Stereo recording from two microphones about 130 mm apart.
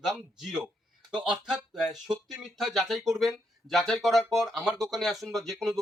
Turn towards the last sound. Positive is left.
turn(degrees=0)  # may be behind; listen again after turning